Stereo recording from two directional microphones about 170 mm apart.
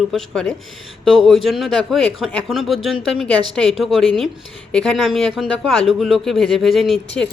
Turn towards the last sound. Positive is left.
turn(degrees=0)  # may be behind; listen again after turning